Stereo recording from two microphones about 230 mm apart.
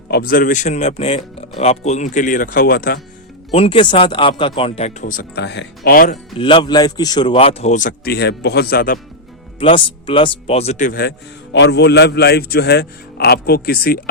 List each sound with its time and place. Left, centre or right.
0.1 s speech: left
3.5 s speech: left
6.3 s speech: left
9.6 s speech: left
11.5 s a man's voice: left